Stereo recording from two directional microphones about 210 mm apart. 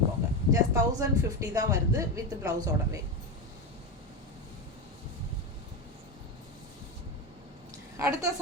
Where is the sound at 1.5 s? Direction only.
15° right (ahead or behind).